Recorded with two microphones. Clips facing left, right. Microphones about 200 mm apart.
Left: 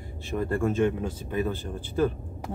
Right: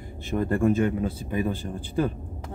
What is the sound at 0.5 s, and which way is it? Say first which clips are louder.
Speech: right 2 dB; 15° right (ahead or behind).